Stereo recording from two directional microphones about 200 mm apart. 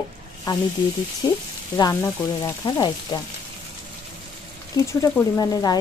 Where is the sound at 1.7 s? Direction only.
20° left (ahead or behind).